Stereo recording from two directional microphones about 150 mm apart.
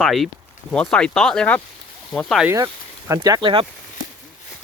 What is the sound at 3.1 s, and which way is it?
Speech, 25° right (ahead or behind).